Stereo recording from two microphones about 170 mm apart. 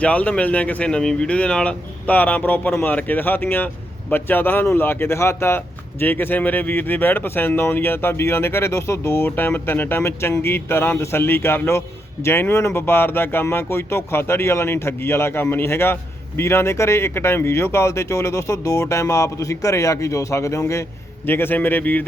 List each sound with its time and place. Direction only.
0.0 s speech: 10° left (ahead or behind)